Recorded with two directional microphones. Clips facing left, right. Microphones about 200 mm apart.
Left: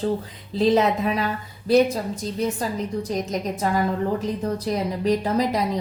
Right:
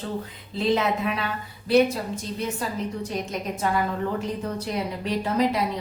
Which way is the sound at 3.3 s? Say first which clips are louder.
Left 3 dB; 35° left (ahead or behind).